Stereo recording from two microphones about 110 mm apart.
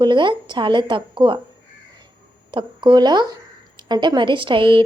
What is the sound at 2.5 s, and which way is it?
A woman's voice, 45° right (ahead or behind).